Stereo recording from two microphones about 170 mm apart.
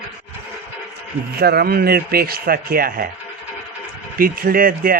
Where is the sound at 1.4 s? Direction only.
65° right (ahead or behind).